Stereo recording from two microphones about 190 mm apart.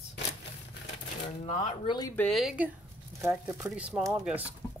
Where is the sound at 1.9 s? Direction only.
20° left (ahead or behind).